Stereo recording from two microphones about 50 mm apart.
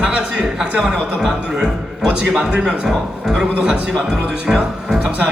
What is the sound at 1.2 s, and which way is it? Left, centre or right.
A man's voice, centre.